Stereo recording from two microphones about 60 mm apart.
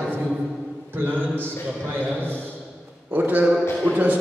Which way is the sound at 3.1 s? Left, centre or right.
Right.